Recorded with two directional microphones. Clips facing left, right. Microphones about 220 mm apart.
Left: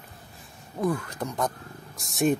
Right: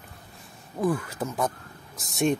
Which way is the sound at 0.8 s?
5° right (ahead or behind).